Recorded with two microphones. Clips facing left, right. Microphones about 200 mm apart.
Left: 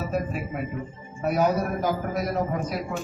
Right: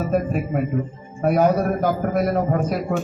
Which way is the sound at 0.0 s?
50° right (ahead or behind).